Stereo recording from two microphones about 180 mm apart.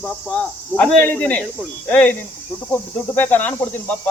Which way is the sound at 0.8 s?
10° left (ahead or behind).